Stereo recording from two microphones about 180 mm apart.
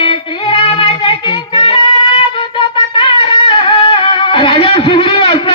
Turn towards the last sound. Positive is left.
turn(degrees=25)  # may be behind; listen again after turning